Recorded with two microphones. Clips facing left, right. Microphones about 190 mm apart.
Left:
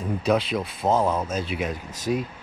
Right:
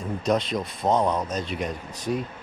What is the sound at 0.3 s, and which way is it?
Speech, 5° left (ahead or behind).